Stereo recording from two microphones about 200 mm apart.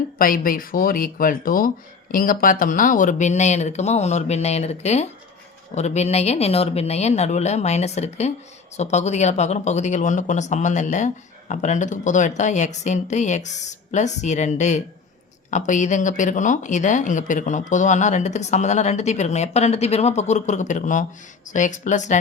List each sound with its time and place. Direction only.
0.2 s speech: 45° left (ahead or behind)